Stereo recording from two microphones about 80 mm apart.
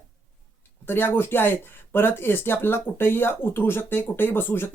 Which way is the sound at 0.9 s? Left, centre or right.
Left.